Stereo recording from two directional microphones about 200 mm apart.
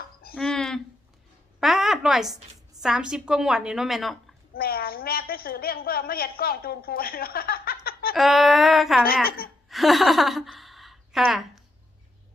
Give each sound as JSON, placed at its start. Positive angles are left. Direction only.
{"t": 0.3, "sound": "a sound", "side_deg": 5}
{"t": 2.8, "sound": "a woman's voice", "side_deg": -5}
{"t": 4.5, "sound": "a woman's voice", "side_deg": 50}
{"t": 8.1, "sound": "a woman's voice", "side_deg": 0}